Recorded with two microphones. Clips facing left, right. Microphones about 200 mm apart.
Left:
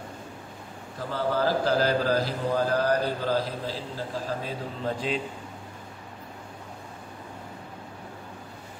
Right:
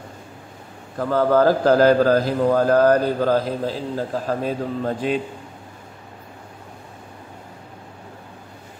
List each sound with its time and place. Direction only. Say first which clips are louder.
0.9 s a man's voice: right 10 dB; 50° right (ahead or behind)